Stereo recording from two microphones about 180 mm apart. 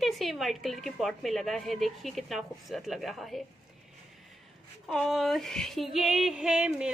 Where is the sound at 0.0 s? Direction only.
Centre (ahead or behind).